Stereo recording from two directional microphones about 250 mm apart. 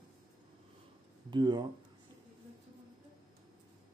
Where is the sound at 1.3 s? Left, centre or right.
Centre.